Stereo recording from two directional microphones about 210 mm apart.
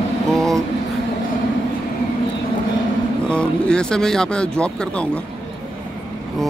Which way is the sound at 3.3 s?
5° left (ahead or behind).